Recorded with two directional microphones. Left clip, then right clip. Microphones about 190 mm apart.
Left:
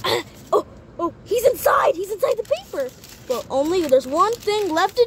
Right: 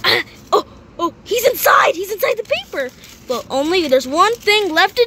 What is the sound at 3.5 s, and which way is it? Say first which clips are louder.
Speech: right 3 dB; 10° right (ahead or behind).